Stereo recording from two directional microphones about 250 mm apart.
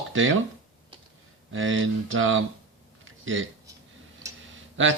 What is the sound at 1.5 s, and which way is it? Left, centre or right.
Speech, right.